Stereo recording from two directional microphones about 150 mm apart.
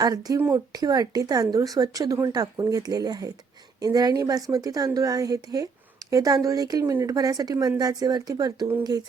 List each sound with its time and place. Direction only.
0.0 s a woman's voice: 25° right (ahead or behind)